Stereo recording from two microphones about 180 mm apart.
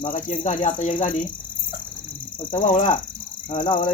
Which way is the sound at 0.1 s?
45° left (ahead or behind).